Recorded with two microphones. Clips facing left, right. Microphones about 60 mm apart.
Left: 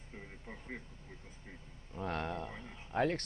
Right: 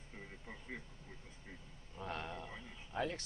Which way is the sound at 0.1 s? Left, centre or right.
Centre.